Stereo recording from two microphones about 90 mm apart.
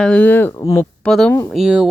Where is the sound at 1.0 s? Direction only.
5° left (ahead or behind).